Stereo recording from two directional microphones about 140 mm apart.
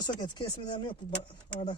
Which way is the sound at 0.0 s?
30° left (ahead or behind).